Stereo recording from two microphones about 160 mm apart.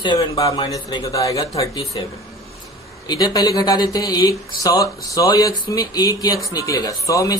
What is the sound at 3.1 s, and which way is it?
Speech, 25° left (ahead or behind).